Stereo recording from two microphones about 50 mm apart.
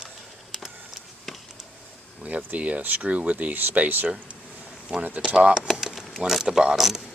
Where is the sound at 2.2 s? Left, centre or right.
Right.